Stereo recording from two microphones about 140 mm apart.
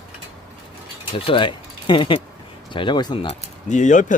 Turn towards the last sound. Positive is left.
turn(degrees=65)  # may be behind; listen again after turning